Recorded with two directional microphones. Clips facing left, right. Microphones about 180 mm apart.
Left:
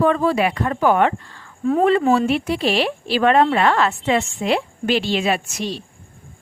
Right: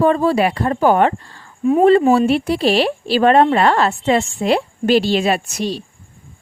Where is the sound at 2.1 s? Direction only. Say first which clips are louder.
Right 4 dB; 35° right (ahead or behind).